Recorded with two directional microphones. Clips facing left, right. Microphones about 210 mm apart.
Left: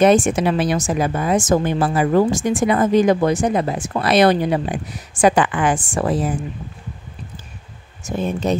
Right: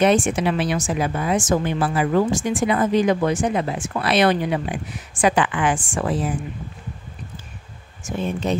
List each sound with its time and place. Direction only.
0.0 s speech: 40° left (ahead or behind)
8.0 s speech: 40° left (ahead or behind)